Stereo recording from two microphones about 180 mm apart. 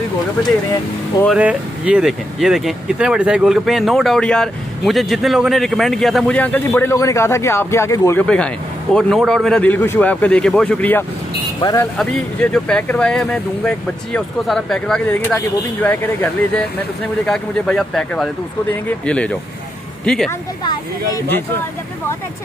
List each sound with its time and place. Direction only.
1.3 s speech: 5° right (ahead or behind); by 11.9 s 15° left (ahead or behind)
12.0 s speech: 5° left (ahead or behind)
20.2 s speech: 15° left (ahead or behind)